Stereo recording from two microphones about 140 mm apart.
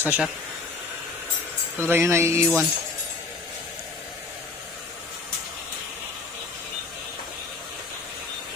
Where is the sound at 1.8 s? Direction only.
15° right (ahead or behind).